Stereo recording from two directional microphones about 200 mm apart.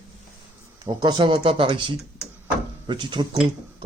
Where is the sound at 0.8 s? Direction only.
20° right (ahead or behind).